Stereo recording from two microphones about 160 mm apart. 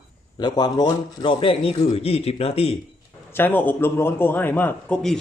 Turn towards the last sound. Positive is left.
turn(degrees=5)  # may be behind; listen again after turning